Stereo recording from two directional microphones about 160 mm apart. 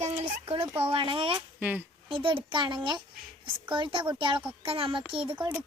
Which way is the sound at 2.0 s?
35° right (ahead or behind).